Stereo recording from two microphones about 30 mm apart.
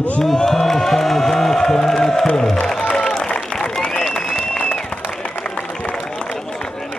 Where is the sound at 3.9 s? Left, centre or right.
Centre.